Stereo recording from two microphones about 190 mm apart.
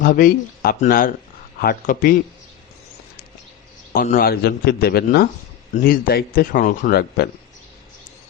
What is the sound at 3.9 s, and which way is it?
A man's voice, 50° left (ahead or behind).